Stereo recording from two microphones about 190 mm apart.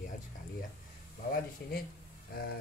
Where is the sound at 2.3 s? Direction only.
55° left (ahead or behind).